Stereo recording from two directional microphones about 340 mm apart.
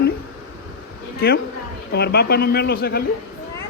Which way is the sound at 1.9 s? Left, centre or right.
Left.